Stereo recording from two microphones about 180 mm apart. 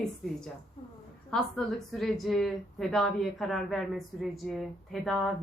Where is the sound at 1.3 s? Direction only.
Centre (ahead or behind).